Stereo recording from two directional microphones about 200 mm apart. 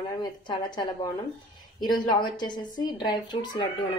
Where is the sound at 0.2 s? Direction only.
20° left (ahead or behind).